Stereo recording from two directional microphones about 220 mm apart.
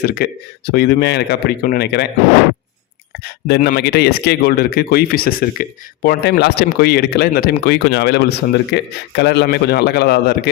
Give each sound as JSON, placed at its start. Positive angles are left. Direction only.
{"t": 0.0, "sound": "speech", "side_deg": 45}
{"t": 3.4, "sound": "speech", "side_deg": 45}